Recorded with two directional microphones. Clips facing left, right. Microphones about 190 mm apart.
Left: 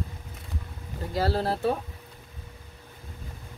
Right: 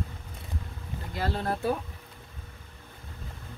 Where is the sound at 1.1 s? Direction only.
35° left (ahead or behind).